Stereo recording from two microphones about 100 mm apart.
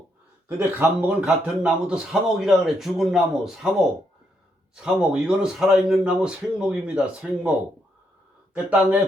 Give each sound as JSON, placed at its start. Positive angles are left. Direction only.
{"t": 0.4, "sound": "speech", "side_deg": -20}
{"t": 1.2, "sound": "a man's voice", "side_deg": -10}